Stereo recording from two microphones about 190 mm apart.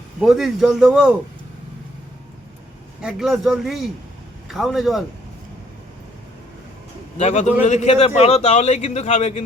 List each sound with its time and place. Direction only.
0.2 s a man's voice: centre (ahead or behind)
3.0 s a man's voice: 5° right (ahead or behind)
7.2 s a man's voice: 40° left (ahead or behind)